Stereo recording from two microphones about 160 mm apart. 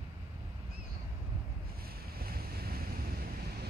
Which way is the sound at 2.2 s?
70° right (ahead or behind).